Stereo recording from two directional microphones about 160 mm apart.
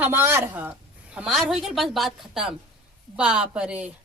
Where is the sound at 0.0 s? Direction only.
15° right (ahead or behind).